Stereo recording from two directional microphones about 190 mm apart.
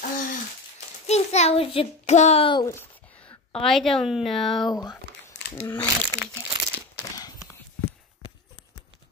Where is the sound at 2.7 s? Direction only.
10° left (ahead or behind).